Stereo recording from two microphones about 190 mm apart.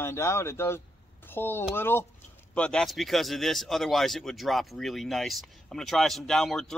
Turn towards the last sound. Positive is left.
turn(degrees=0)  # may be behind; listen again after turning